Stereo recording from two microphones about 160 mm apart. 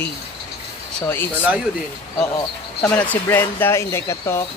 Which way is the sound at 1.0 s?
15° left (ahead or behind).